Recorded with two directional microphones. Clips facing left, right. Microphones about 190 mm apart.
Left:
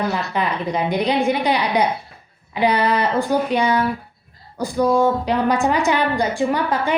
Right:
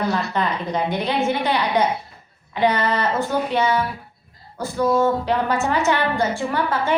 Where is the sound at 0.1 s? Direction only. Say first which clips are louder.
Even; 10° left (ahead or behind).